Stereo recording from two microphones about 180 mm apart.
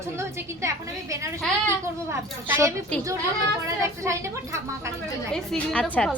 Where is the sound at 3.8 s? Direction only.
15° right (ahead or behind).